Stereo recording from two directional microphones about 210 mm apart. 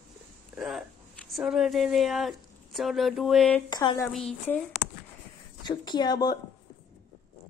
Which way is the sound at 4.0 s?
5° left (ahead or behind).